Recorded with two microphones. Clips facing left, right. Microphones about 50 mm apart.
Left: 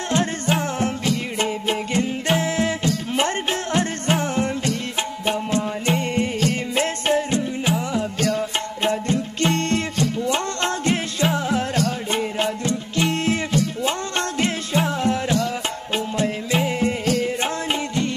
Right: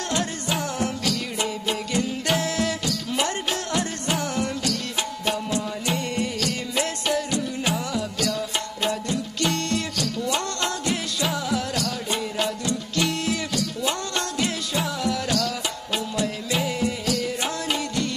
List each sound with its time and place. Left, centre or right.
0.1 s music: left